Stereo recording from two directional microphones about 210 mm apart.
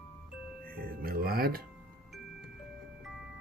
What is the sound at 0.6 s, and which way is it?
Music, 45° right (ahead or behind).